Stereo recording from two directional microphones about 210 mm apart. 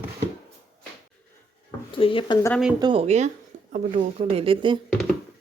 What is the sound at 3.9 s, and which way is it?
Speech, 25° right (ahead or behind).